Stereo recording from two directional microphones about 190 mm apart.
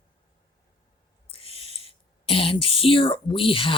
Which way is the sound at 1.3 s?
30° left (ahead or behind).